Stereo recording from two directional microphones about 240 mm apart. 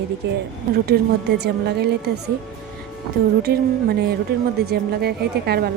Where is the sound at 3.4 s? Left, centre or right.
Right.